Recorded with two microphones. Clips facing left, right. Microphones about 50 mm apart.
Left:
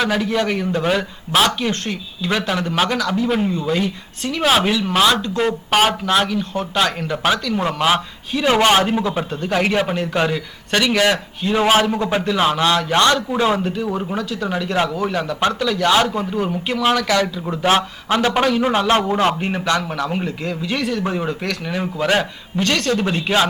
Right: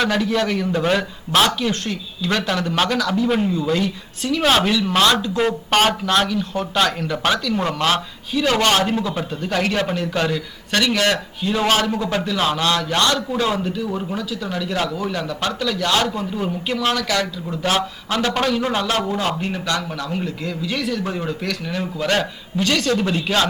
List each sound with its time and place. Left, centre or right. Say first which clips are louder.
0.0 s a man's voice: even; centre
0.7 s speech: even; centre
1.9 s a man's voice: left 1 dB; centre
6.1 s a man's voice: left 1 dB; centre
14.2 s speech: left 3 dB; left
14.5 s a man's voice: left 3 dB; left
15.5 s a man's voice: left 3 dB; centre